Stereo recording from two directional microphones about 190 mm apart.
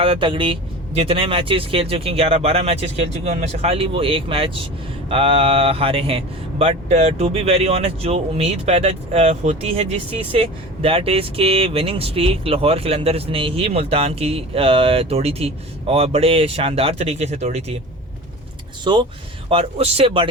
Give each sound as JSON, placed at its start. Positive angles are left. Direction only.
{"t": 0.0, "sound": "a man's voice", "side_deg": -25}
{"t": 19.5, "sound": "a man's voice", "side_deg": -30}